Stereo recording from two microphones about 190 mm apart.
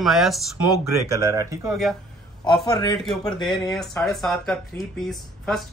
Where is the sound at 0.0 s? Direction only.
Centre (ahead or behind).